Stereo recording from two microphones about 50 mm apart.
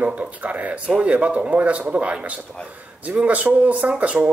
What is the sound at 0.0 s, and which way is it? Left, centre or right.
Speech, right.